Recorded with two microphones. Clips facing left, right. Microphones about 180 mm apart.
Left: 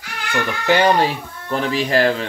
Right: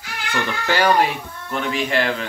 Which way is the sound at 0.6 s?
20° left (ahead or behind).